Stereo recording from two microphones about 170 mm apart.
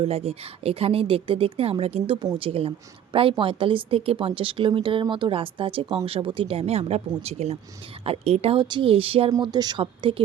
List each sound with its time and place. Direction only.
0.0 s a woman's voice: 35° right (ahead or behind)